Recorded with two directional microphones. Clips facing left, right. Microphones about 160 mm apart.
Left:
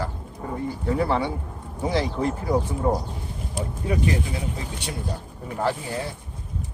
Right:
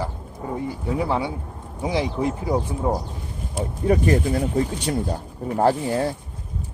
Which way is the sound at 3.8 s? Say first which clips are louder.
Right 6 dB; 45° right (ahead or behind).